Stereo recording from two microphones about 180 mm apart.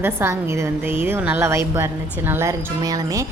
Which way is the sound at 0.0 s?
15° right (ahead or behind).